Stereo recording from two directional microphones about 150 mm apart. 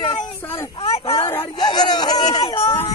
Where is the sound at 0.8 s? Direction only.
40° left (ahead or behind).